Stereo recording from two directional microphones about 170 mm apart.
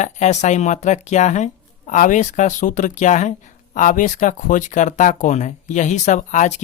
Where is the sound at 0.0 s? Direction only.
45° left (ahead or behind).